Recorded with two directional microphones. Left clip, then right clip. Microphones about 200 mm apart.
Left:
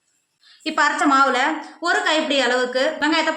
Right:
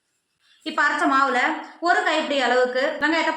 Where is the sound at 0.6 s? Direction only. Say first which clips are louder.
Left 2 dB; 60° left (ahead or behind).